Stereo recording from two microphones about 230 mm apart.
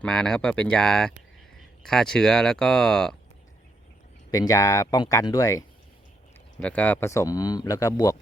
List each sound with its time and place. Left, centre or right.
0.0 s speech: centre
4.3 s speech: centre